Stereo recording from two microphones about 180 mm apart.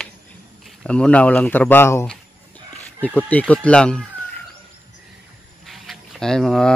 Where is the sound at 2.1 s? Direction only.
10° left (ahead or behind).